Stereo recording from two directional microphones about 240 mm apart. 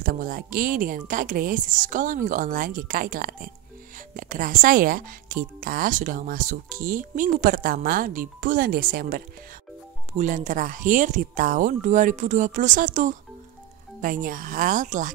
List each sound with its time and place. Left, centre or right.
0.0 s speech: right